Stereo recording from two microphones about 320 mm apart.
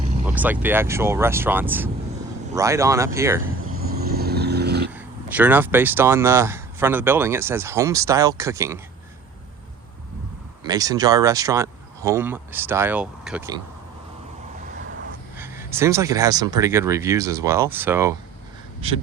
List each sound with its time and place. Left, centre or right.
0.3 s speech: centre
3.6 s vehicle: right
4.9 s speech: centre
10.7 s speech: centre
15.4 s speech: centre
18.8 s speech: centre